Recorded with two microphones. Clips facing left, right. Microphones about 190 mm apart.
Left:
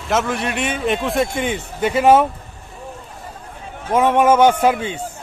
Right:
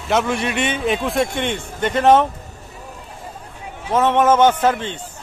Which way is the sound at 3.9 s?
10° left (ahead or behind).